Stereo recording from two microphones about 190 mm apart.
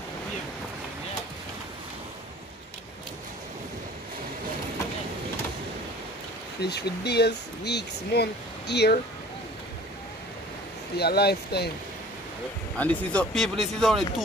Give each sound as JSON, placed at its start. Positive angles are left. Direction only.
{"t": 6.6, "sound": "speech", "side_deg": 60}
{"t": 11.0, "sound": "speech", "side_deg": 55}
{"t": 12.7, "sound": "speech", "side_deg": 5}